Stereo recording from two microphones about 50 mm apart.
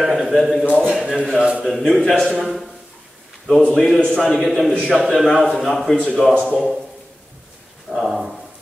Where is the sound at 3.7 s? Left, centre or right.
Centre.